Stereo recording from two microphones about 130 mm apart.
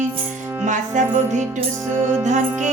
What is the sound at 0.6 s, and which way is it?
Music, 65° right (ahead or behind).